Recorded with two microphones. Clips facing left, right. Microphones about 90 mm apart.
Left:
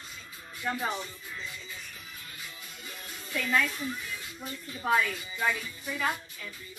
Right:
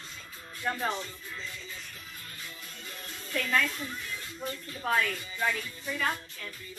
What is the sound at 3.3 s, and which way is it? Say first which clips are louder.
Speech: even; 10° left (ahead or behind).